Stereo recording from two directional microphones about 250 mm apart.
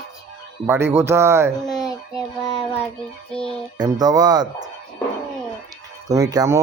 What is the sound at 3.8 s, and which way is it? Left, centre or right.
Speech, centre.